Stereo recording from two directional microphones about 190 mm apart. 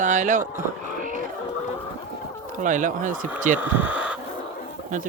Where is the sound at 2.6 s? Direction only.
40° right (ahead or behind).